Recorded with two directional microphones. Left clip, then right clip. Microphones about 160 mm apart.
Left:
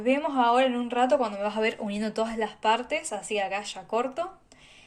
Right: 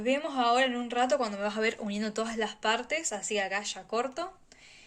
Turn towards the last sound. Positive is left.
turn(degrees=-15)  # may be behind; listen again after turning